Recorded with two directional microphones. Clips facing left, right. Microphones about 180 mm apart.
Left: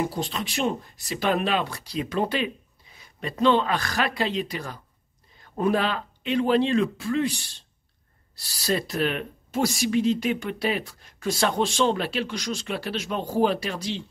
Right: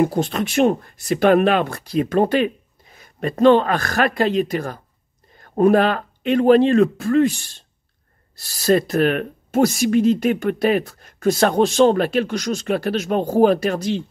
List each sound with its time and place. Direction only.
0.0 s speech: 55° right (ahead or behind)